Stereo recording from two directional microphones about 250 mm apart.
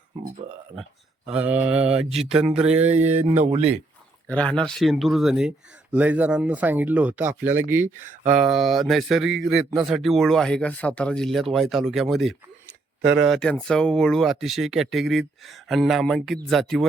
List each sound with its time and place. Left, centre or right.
1.3 s speech: centre
3.3 s speech: right
4.3 s speech: centre